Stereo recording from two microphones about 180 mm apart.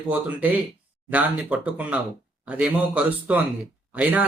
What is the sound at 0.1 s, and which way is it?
Speech, 10° right (ahead or behind).